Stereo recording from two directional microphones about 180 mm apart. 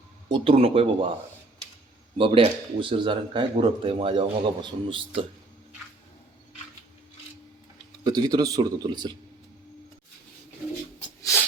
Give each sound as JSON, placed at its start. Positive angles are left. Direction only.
{"t": 0.3, "sound": "speech", "side_deg": -25}
{"t": 2.1, "sound": "speech", "side_deg": -30}
{"t": 8.0, "sound": "speech", "side_deg": -20}